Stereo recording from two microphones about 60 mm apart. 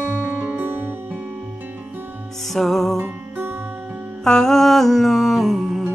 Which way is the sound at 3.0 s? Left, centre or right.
Right.